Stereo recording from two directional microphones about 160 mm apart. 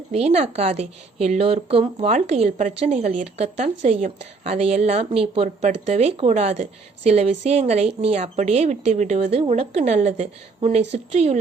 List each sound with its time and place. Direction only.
0.1 s a woman's voice: 40° right (ahead or behind)